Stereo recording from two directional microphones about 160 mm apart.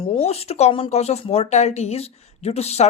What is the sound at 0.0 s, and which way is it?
Speech, 35° left (ahead or behind).